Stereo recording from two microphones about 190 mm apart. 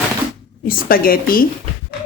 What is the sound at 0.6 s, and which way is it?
Speech, 50° left (ahead or behind).